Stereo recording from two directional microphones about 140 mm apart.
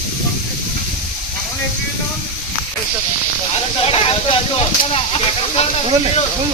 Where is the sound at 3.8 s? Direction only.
45° left (ahead or behind).